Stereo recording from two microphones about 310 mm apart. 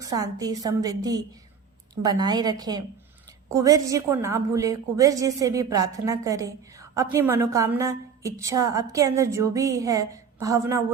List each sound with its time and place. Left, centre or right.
0.0 s a woman's voice: centre